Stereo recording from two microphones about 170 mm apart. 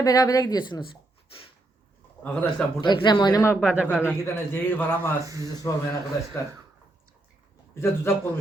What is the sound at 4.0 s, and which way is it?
A man's voice, 15° left (ahead or behind).